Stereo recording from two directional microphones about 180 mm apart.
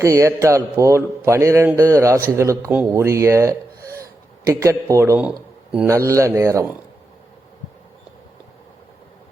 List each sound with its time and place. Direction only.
0.0 s a man's voice: 15° right (ahead or behind)
3.8 s gasp: 15° right (ahead or behind)
5.7 s a man's voice: 10° right (ahead or behind)